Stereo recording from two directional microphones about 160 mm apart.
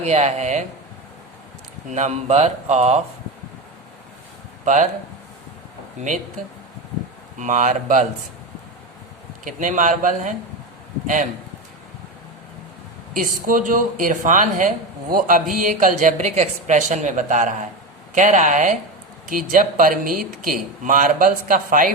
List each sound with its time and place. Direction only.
0.0 s a woman's voice: 45° right (ahead or behind)
1.9 s a woman's voice: 45° right (ahead or behind)
4.6 s speech: 50° right (ahead or behind)
7.3 s a woman's voice: 50° right (ahead or behind)
9.4 s a woman's voice: 55° right (ahead or behind)
13.1 s a woman's voice: 60° right (ahead or behind)